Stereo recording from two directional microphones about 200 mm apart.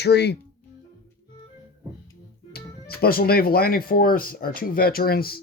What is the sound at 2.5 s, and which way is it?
Speech, 50° left (ahead or behind).